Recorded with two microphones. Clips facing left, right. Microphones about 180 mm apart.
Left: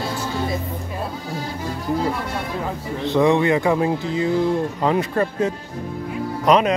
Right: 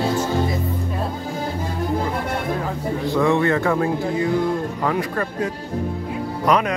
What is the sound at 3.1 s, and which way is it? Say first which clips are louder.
A man's voice: left 2 dB; 20° left (ahead or behind).